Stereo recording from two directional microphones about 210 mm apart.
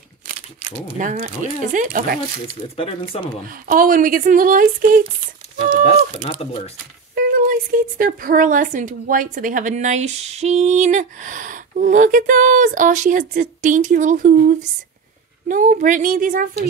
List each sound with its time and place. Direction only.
0.9 s a woman's voice: 35° right (ahead or behind)
2.7 s speech: 25° left (ahead or behind)
3.4 s a woman's voice: 40° right (ahead or behind)
6.1 s speech: 30° left (ahead or behind)
7.2 s a woman's voice: 40° right (ahead or behind)